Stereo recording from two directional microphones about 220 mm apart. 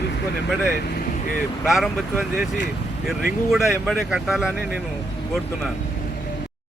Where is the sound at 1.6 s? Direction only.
Centre (ahead or behind).